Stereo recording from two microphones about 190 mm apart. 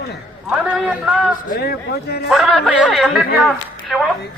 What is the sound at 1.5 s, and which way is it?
Speech, 55° left (ahead or behind).